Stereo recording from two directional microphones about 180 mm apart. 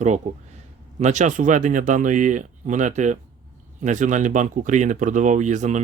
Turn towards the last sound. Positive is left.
turn(degrees=-40)  # may be behind; listen again after turning